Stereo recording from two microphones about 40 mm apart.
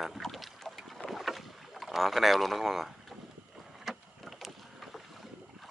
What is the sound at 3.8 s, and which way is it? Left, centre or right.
Vehicle, centre.